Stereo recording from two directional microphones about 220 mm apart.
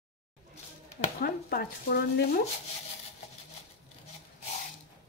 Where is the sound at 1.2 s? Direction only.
45° left (ahead or behind).